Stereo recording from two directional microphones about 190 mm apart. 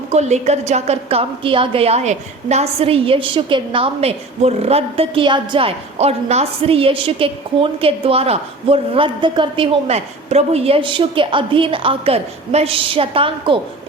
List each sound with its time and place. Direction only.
0.1 s a woman's voice: 35° right (ahead or behind)